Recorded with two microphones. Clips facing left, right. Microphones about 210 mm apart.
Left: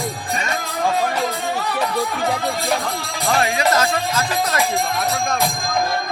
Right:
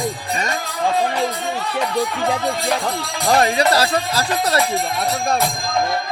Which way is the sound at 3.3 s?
40° right (ahead or behind).